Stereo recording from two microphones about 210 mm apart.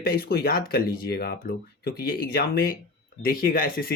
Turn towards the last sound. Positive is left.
turn(degrees=45)  # may be behind; listen again after turning